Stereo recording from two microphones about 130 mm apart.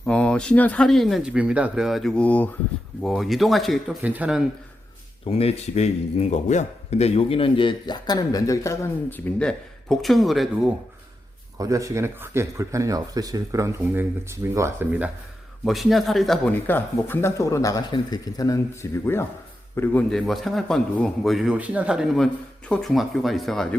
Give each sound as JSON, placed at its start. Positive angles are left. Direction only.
{"t": 0.0, "sound": "speech", "side_deg": 10}
{"t": 3.0, "sound": "speech", "side_deg": 0}
{"t": 4.0, "sound": "speech", "side_deg": -10}
{"t": 5.2, "sound": "speech", "side_deg": 50}
{"t": 11.5, "sound": "speech", "side_deg": -25}
{"t": 14.8, "sound": "speech", "side_deg": -10}
{"t": 16.5, "sound": "a man's voice", "side_deg": 15}
{"t": 20.1, "sound": "speech", "side_deg": 0}